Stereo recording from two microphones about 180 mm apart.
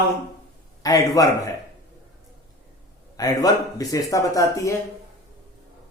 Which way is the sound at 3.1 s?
20° left (ahead or behind).